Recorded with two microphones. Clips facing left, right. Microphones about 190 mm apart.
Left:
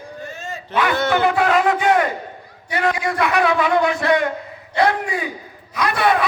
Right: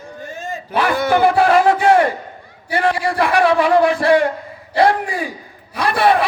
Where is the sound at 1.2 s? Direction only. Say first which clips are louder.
Right 5 dB; 30° right (ahead or behind).